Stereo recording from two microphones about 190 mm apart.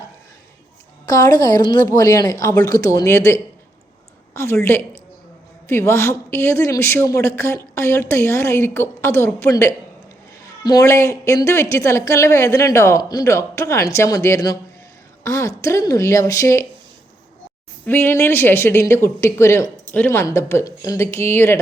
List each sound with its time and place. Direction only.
1.0 s a woman's voice: 20° left (ahead or behind)
17.8 s a woman's voice: 10° left (ahead or behind)